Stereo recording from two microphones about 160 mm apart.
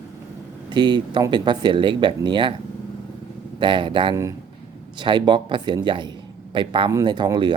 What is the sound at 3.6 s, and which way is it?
Speech, 30° right (ahead or behind).